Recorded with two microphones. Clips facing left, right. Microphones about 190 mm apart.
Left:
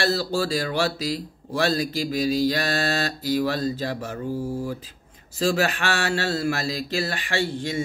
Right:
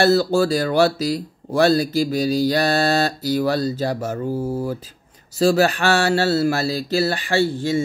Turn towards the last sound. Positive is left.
turn(degrees=-40)  # may be behind; listen again after turning